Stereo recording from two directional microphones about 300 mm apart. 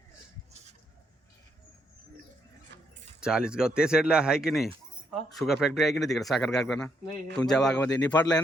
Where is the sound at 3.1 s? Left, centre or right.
Centre.